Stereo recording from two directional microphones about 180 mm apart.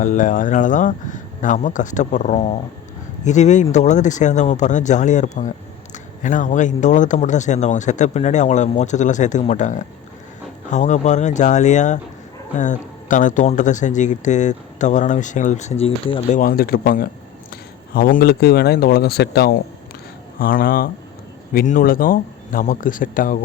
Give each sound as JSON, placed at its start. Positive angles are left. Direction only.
{"t": 0.0, "sound": "speech", "side_deg": 45}
{"t": 16.3, "sound": "speech", "side_deg": 55}
{"t": 20.4, "sound": "speech", "side_deg": 50}